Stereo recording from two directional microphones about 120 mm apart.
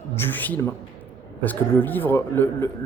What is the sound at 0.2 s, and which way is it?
A man's voice, 15° left (ahead or behind).